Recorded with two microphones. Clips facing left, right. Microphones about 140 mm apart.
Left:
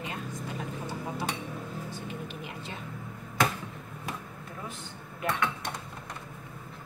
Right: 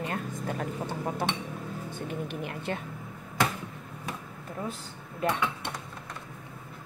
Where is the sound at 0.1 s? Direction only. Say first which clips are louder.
Right 4 dB; 55° right (ahead or behind).